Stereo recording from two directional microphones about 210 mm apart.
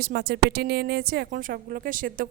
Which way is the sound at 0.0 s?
50° right (ahead or behind).